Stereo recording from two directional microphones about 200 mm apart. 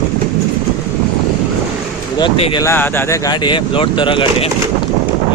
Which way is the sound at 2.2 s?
25° left (ahead or behind).